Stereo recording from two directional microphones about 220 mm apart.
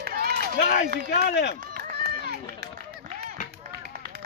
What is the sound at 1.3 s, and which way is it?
Speech, 50° left (ahead or behind).